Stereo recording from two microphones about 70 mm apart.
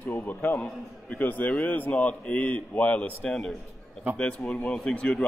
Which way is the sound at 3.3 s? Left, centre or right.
Centre.